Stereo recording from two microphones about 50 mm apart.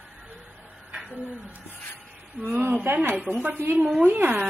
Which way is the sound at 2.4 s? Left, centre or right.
Right.